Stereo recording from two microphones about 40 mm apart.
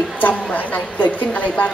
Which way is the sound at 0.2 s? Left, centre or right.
Left.